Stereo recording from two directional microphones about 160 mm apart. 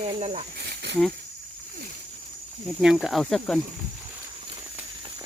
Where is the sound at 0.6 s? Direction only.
90° right.